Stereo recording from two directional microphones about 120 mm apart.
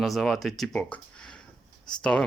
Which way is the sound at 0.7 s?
10° left (ahead or behind).